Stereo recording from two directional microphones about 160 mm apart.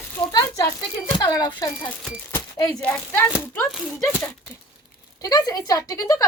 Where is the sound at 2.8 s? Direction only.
10° left (ahead or behind).